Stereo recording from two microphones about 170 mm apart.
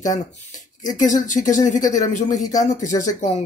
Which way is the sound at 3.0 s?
50° left (ahead or behind).